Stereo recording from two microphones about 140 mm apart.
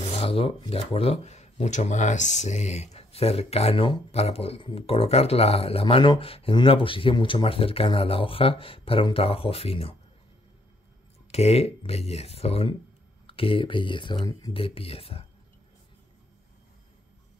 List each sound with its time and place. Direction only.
0.2 s speech: 40° left (ahead or behind)
11.3 s speech: 45° left (ahead or behind)